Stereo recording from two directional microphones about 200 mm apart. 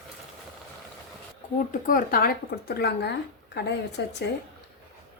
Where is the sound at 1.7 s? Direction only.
45° left (ahead or behind).